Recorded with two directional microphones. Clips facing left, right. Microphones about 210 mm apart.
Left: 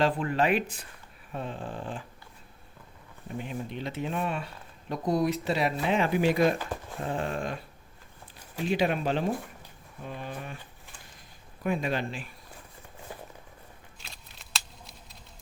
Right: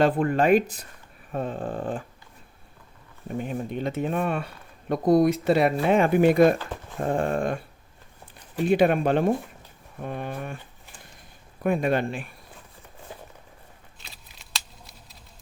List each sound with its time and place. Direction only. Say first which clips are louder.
0.0 s speech: right 5 dB; 50° right (ahead or behind)
3.3 s speech: right 6 dB; 45° right (ahead or behind)
8.6 s speech: right 7 dB; 55° right (ahead or behind)
11.6 s speech: right 6 dB; 55° right (ahead or behind)
14.0 s scissors: even; centre (ahead or behind)